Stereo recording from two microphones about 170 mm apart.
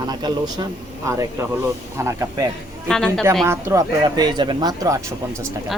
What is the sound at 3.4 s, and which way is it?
Speech, 15° right (ahead or behind).